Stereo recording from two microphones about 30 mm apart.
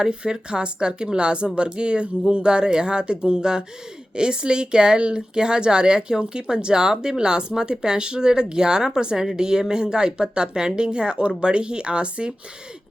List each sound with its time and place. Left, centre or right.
0.0 s a woman's voice: right